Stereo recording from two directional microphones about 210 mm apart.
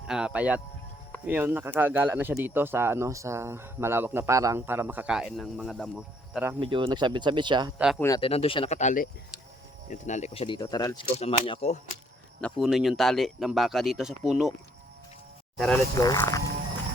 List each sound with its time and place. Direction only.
0.1 s speech: 5° right (ahead or behind)
6.3 s speech: 10° right (ahead or behind)
6.6 s speech: 25° right (ahead or behind)
7.8 s speech: centre (ahead or behind)
8.0 s speech: 20° left (ahead or behind)
12.4 s speech: 5° left (ahead or behind)
15.5 s speech: 5° left (ahead or behind)
16.0 s speech: 15° left (ahead or behind)